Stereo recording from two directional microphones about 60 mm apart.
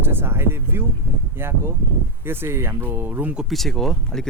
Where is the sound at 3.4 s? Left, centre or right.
Centre.